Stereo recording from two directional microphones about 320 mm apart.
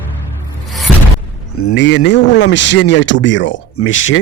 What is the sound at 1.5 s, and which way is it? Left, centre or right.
Speech, left.